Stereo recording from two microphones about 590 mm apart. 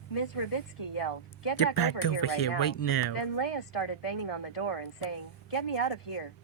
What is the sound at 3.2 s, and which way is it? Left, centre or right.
Speech, left.